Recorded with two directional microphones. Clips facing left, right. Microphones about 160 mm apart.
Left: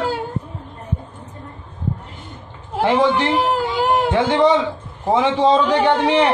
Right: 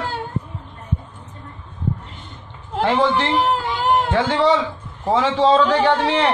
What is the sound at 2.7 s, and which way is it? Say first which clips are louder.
A man's voice: left 2 dB; 15° left (ahead or behind).